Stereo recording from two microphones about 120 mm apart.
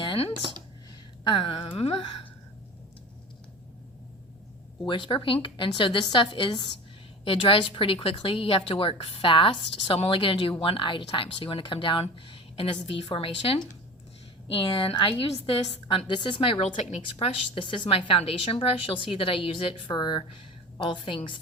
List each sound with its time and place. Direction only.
0.0 s a sound: 50° left (ahead or behind)
1.2 s a woman's voice: 45° left (ahead or behind)
4.9 s a woman's voice: 45° left (ahead or behind)
16.7 s a woman's voice: 70° left (ahead or behind); by 21.3 s 45° left (ahead or behind)